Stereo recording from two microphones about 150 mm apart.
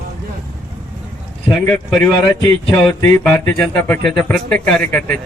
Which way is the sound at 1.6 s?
10° left (ahead or behind).